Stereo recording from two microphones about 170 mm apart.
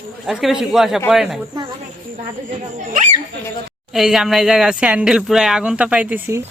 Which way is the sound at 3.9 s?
Centre (ahead or behind).